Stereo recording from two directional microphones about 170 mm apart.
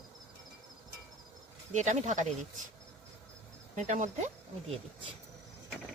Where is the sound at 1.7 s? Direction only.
45° right (ahead or behind).